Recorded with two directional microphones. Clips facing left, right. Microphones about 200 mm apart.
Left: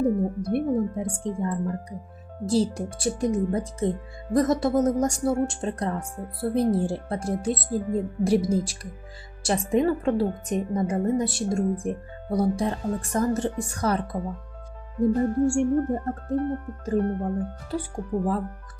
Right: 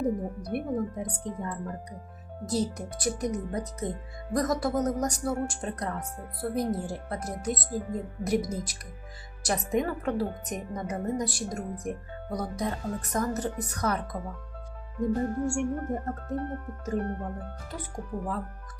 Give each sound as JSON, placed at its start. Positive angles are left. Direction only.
{"t": 0.0, "sound": "speech", "side_deg": 25}